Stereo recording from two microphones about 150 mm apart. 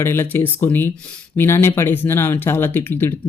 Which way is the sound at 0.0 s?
15° left (ahead or behind).